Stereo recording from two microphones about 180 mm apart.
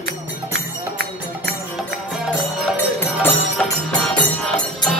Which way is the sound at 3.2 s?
10° left (ahead or behind).